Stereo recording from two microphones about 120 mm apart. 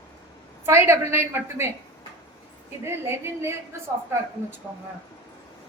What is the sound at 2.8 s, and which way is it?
Speech, 20° right (ahead or behind).